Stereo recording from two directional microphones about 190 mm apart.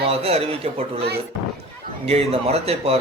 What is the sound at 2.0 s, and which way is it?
Speech, 30° right (ahead or behind).